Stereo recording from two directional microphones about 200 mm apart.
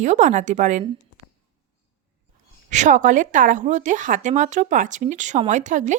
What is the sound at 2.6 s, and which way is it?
Speech, 35° right (ahead or behind).